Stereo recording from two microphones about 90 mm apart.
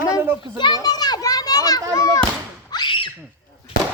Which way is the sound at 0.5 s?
60° left (ahead or behind).